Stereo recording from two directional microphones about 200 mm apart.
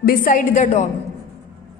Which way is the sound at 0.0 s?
45° left (ahead or behind).